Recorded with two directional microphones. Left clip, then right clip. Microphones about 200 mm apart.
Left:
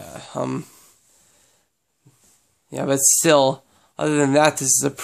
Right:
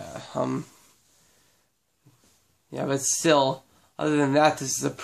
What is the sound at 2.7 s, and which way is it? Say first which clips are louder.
Speech: left 7 dB; 50° left (ahead or behind).